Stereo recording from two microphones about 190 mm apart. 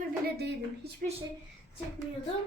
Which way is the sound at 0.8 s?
60° right (ahead or behind).